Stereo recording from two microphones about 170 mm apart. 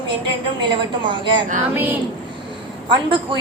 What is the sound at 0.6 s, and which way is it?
Speech, 25° right (ahead or behind).